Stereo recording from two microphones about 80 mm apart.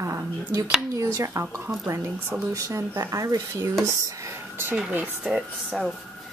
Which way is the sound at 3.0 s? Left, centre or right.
Right.